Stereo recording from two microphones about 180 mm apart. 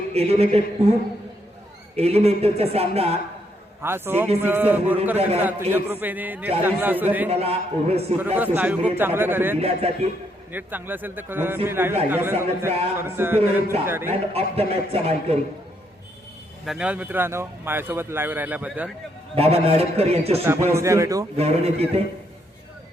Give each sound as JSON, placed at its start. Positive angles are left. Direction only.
{"t": 0.1, "sound": "speech", "side_deg": -35}
{"t": 2.0, "sound": "speech", "side_deg": -35}
{"t": 3.8, "sound": "speech", "side_deg": -10}
{"t": 7.3, "sound": "speech", "side_deg": -35}
{"t": 8.5, "sound": "speech", "side_deg": -10}
{"t": 9.6, "sound": "speech", "side_deg": -35}
{"t": 10.5, "sound": "speech", "side_deg": -10}
{"t": 14.3, "sound": "speech", "side_deg": -35}
{"t": 16.6, "sound": "speech", "side_deg": -5}
{"t": 19.4, "sound": "speech", "side_deg": -35}
{"t": 20.4, "sound": "speech", "side_deg": -15}
{"t": 21.3, "sound": "speech", "side_deg": -35}